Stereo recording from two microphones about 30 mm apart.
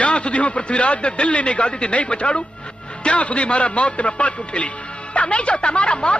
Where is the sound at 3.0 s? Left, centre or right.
Left.